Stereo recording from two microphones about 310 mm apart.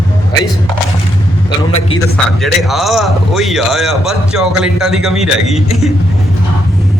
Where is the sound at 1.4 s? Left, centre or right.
Centre.